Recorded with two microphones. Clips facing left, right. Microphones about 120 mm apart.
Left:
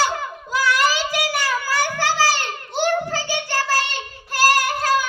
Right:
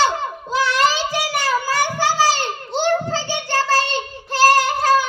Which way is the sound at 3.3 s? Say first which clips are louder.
Right 4 dB; 20° right (ahead or behind).